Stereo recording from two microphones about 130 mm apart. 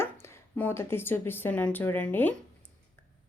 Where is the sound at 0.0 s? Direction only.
20° left (ahead or behind).